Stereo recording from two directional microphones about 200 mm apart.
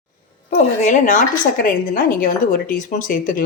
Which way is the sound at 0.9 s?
40° left (ahead or behind).